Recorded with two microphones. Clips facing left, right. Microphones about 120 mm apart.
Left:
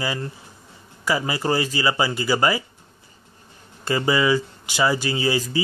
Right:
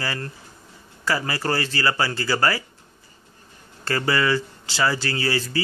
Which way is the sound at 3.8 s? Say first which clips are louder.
Left 2 dB; 15° left (ahead or behind).